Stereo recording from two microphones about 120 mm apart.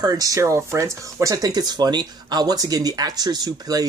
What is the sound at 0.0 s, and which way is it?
Speech, 30° right (ahead or behind).